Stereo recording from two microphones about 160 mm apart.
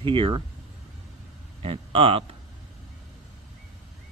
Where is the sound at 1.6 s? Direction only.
35° right (ahead or behind).